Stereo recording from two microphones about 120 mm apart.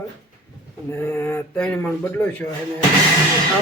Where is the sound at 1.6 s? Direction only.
10° left (ahead or behind).